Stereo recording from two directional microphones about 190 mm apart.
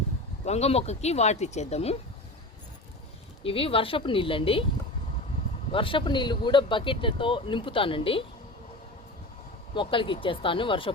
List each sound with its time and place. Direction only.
0.4 s speech: 35° left (ahead or behind)
3.4 s speech: 30° left (ahead or behind)
5.7 s speech: 25° left (ahead or behind)
9.7 s speech: 25° left (ahead or behind)